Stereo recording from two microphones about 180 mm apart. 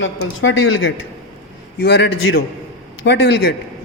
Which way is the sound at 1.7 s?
65° left (ahead or behind).